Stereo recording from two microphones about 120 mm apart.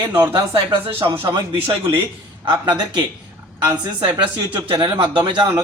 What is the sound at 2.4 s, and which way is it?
Speech, 35° right (ahead or behind).